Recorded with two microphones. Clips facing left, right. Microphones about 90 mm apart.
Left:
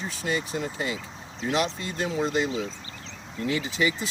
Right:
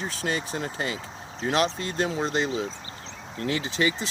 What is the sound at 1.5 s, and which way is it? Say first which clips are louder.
Speech: right 2 dB; 30° right (ahead or behind).